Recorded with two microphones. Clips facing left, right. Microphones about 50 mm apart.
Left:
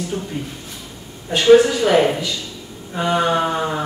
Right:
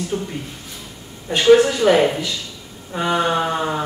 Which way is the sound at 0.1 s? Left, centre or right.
Centre.